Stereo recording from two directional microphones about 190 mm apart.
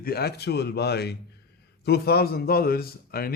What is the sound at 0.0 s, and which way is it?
A man's voice, 55° left (ahead or behind).